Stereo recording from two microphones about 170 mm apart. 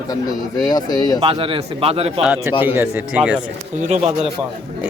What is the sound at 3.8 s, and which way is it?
Speech, 40° right (ahead or behind).